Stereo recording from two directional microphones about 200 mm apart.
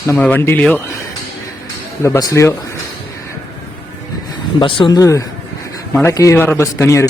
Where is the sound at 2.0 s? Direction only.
15° left (ahead or behind).